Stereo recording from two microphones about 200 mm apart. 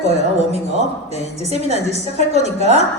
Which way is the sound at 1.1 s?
35° right (ahead or behind).